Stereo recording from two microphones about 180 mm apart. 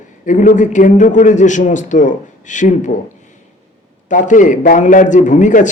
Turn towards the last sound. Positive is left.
turn(degrees=45)  # may be behind; listen again after turning